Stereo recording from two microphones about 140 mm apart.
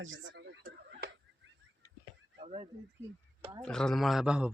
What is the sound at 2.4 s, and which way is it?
Speech, 45° right (ahead or behind).